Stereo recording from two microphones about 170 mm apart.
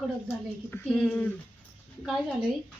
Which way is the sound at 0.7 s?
10° left (ahead or behind).